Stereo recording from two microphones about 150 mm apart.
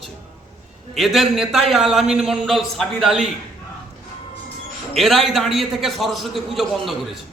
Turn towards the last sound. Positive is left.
turn(degrees=0)  # may be behind; listen again after turning